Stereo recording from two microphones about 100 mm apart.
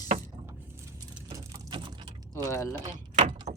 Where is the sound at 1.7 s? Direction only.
55° right (ahead or behind).